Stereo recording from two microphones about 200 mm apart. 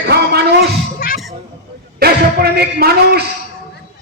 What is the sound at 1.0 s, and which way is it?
Music, 45° left (ahead or behind).